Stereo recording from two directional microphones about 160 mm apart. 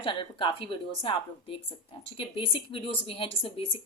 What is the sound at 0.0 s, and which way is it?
A woman's voice, 30° left (ahead or behind).